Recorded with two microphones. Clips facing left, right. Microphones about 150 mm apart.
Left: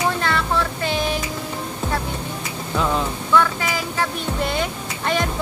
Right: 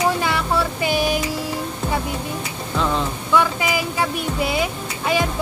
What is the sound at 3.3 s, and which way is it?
Speech, 10° right (ahead or behind).